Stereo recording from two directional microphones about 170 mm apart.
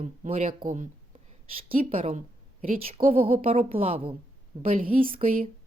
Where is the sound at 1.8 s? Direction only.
35° right (ahead or behind).